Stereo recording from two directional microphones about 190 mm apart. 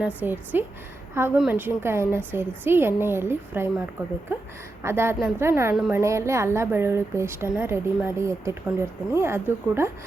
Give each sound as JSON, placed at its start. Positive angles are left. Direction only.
{"t": 0.2, "sound": "a woman's voice", "side_deg": -10}